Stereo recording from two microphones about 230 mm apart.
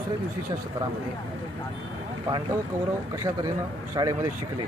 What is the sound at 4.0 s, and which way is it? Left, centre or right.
Speech, centre.